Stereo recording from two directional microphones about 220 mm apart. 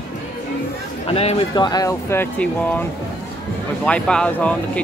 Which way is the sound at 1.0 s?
25° left (ahead or behind).